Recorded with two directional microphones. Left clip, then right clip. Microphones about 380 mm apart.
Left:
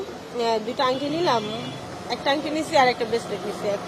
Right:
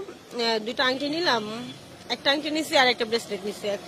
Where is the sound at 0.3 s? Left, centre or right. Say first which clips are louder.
Left 2 dB; right.